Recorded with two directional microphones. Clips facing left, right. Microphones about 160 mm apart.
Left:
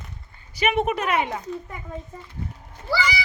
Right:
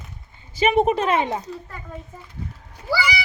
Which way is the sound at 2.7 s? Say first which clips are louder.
Right 1 dB; 10° right (ahead or behind).